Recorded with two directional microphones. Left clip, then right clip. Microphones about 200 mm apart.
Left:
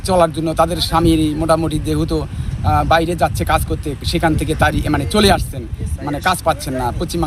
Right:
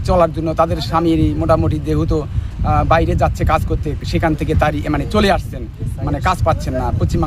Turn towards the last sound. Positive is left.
turn(degrees=-5)  # may be behind; listen again after turning